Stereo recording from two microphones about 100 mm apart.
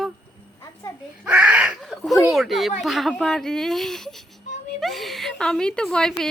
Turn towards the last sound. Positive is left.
turn(degrees=5)  # may be behind; listen again after turning